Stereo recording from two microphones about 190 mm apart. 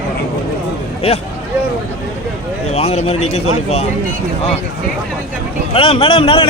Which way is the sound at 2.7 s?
35° left (ahead or behind).